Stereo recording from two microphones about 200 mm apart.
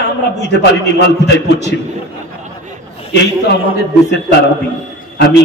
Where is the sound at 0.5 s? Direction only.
60° left (ahead or behind).